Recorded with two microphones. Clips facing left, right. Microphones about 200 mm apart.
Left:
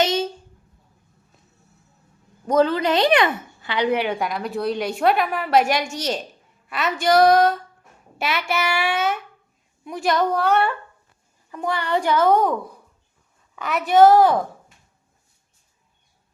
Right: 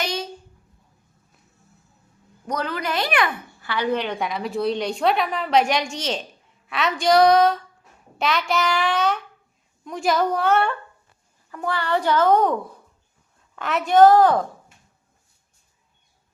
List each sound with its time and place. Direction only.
0.0 s a sound: 25° left (ahead or behind)
2.5 s a woman's voice: 25° left (ahead or behind); by 10.8 s centre (ahead or behind)
11.5 s a child's voice: 15° left (ahead or behind)
13.6 s a child's voice: centre (ahead or behind)